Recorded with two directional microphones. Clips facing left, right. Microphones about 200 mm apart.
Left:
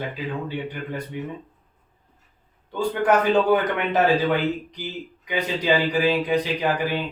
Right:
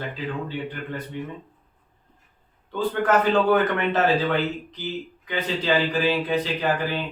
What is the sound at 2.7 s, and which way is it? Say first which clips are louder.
Speech: left 1 dB; 15° left (ahead or behind).